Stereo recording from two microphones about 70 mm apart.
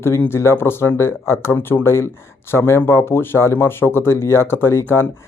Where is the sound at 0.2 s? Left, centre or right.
Left.